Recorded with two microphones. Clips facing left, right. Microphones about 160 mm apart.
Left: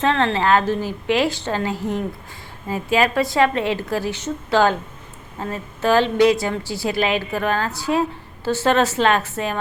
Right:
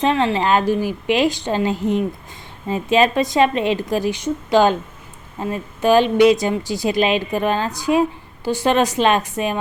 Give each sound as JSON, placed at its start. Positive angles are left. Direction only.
{"t": 0.0, "sound": "a woman's voice", "side_deg": -15}